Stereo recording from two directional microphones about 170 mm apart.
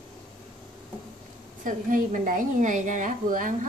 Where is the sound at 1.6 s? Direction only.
50° right (ahead or behind).